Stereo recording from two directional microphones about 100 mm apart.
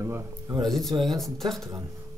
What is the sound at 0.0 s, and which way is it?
Speech, 30° right (ahead or behind).